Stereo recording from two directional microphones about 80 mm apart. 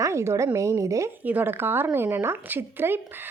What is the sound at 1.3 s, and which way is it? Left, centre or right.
Speech, right.